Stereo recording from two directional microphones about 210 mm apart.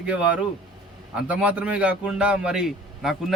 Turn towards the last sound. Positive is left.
turn(degrees=0)  # may be behind; listen again after turning